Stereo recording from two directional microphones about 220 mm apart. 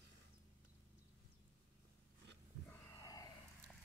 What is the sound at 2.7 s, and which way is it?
Snort, 15° left (ahead or behind).